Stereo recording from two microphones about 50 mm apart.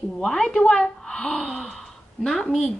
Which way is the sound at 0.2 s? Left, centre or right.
Centre.